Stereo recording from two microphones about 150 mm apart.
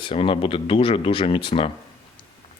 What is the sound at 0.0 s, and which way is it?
Speech, 35° left (ahead or behind).